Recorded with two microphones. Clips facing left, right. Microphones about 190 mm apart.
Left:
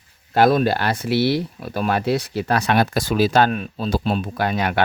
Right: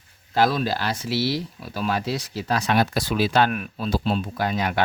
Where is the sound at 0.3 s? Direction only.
55° left (ahead or behind).